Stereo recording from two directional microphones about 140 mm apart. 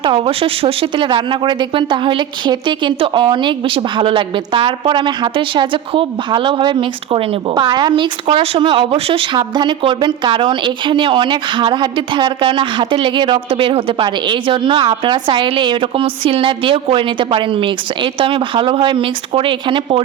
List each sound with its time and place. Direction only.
0.0 s speech: 40° right (ahead or behind)